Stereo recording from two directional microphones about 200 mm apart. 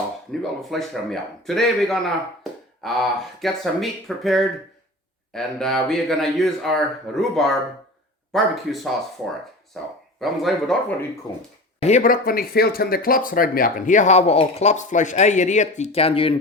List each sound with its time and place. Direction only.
0.3 s a man's voice: centre (ahead or behind)
10.2 s a man's voice: centre (ahead or behind)
11.8 s speech: 35° left (ahead or behind)